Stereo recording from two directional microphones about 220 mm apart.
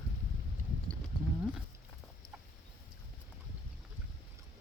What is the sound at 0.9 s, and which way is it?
Livestock, 5° left (ahead or behind).